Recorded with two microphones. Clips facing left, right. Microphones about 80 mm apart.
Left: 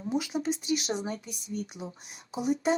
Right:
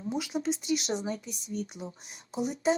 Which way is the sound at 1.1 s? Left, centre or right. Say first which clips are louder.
Right 1 dB; left.